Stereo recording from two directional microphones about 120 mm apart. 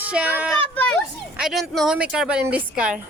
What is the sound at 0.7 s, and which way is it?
Speech, 10° left (ahead or behind).